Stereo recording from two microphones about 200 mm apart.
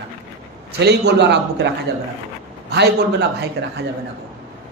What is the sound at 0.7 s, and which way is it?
Speech, 55° right (ahead or behind).